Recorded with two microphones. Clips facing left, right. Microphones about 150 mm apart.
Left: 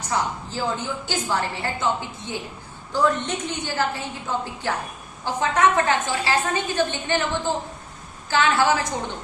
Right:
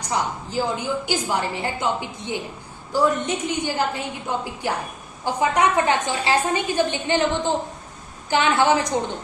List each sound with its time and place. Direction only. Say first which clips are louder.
0.1 s a woman's voice: right 1 dB; 15° right (ahead or behind)